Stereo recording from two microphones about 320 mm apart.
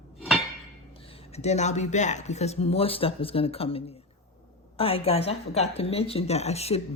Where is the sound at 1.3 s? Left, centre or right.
Centre.